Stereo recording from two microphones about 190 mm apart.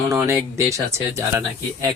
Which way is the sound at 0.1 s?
15° right (ahead or behind).